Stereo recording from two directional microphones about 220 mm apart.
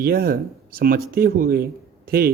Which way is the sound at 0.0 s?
40° right (ahead or behind).